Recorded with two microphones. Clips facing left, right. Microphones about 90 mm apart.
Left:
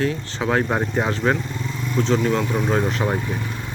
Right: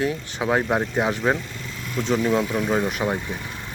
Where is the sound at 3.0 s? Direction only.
5° left (ahead or behind).